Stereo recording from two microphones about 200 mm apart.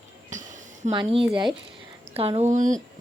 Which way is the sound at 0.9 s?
25° right (ahead or behind).